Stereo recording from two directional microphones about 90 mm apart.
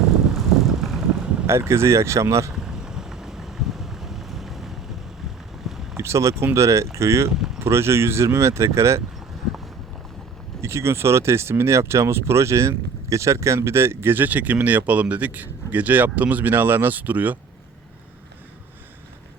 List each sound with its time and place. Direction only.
0.3 s vehicle: 5° right (ahead or behind)
1.5 s speech: 30° right (ahead or behind)
2.5 s vehicle: 5° right (ahead or behind)
5.6 s boat: 5° right (ahead or behind)
6.0 s speech: 30° right (ahead or behind)
7.3 s vehicle: 5° right (ahead or behind)
7.6 s speech: 30° right (ahead or behind)
10.6 s speech: 30° right (ahead or behind)